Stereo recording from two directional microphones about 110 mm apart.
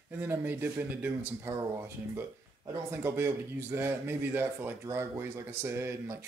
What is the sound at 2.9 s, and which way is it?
A man's voice, 20° right (ahead or behind).